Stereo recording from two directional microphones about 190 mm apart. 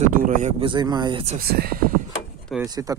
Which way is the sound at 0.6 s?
25° right (ahead or behind).